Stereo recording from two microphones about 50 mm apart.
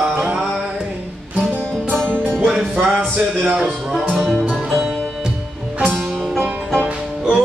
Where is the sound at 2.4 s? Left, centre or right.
Centre.